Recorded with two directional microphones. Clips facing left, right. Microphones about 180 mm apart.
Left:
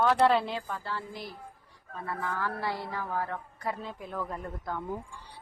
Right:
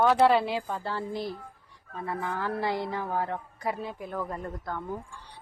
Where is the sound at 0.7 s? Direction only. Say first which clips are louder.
Right 4 dB; 30° right (ahead or behind).